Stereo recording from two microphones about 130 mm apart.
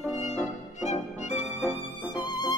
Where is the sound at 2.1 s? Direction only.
30° left (ahead or behind).